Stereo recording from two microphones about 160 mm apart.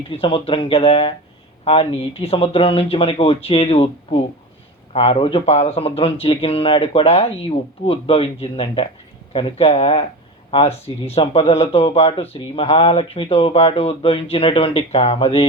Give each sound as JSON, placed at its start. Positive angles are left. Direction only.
{"t": 0.1, "sound": "speech", "side_deg": 35}